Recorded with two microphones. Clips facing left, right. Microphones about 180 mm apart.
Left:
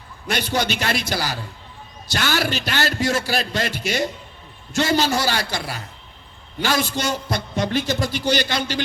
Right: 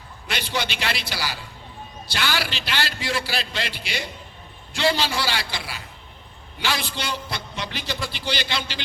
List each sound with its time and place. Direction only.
0.3 s a man's voice: 45° left (ahead or behind)